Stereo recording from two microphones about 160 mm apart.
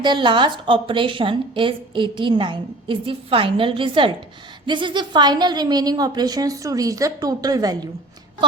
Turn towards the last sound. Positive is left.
turn(degrees=-25)  # may be behind; listen again after turning